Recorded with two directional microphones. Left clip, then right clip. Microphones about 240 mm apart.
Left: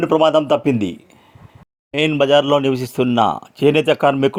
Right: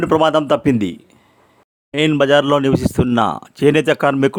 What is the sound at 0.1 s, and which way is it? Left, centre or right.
Speech, right.